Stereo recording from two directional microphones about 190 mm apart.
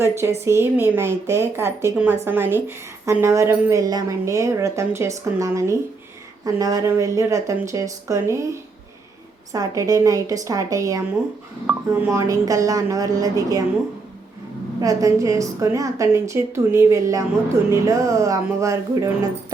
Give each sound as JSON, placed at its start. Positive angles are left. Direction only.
{"t": 0.4, "sound": "a woman's voice", "side_deg": -10}
{"t": 9.5, "sound": "a woman's voice", "side_deg": -20}
{"t": 14.8, "sound": "a woman's voice", "side_deg": -15}